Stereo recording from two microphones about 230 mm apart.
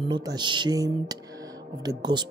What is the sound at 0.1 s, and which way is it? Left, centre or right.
Speech, centre.